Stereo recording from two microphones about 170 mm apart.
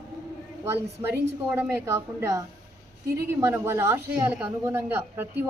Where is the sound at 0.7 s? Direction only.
15° right (ahead or behind).